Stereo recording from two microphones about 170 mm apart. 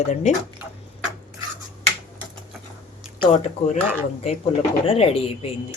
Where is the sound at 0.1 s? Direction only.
45° left (ahead or behind).